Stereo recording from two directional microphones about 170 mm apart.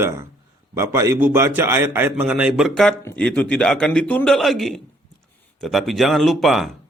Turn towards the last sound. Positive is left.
turn(degrees=0)  # may be behind; listen again after turning